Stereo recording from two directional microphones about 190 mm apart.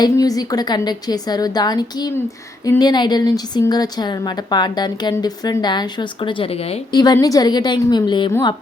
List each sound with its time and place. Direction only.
0.0 s a woman's voice: 20° left (ahead or behind)
7.0 s a woman's voice: 20° left (ahead or behind)